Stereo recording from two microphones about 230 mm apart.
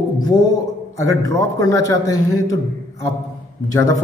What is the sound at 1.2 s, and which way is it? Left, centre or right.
A man's voice, centre.